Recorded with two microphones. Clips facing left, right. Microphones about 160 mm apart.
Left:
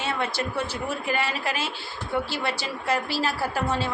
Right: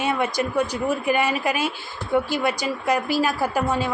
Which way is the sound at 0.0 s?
15° right (ahead or behind).